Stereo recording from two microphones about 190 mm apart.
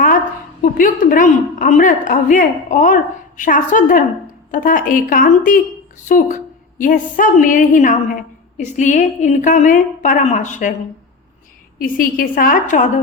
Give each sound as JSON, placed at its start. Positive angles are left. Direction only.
{"t": 0.6, "sound": "a woman's voice", "side_deg": 45}
{"t": 11.8, "sound": "a woman's voice", "side_deg": 50}